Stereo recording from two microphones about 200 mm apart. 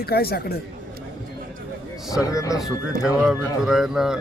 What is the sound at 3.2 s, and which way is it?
Speech, 5° right (ahead or behind).